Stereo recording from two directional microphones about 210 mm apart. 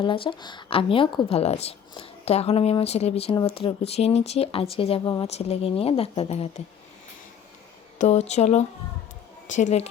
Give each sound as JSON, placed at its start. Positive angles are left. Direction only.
{"t": 0.0, "sound": "speech", "side_deg": 25}
{"t": 7.9, "sound": "speech", "side_deg": 30}